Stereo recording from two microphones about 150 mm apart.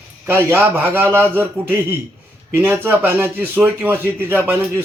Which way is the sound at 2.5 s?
15° right (ahead or behind).